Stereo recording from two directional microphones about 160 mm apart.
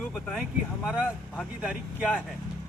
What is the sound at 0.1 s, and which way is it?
Speech, centre (ahead or behind).